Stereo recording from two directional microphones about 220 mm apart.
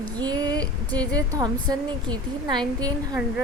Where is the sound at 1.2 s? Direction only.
15° right (ahead or behind).